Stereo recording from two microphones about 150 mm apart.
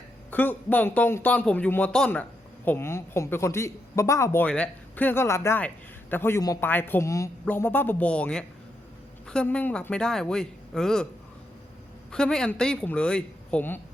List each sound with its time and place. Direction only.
0.3 s a man's voice: 10° left (ahead or behind)
12.1 s a man's voice: 5° left (ahead or behind)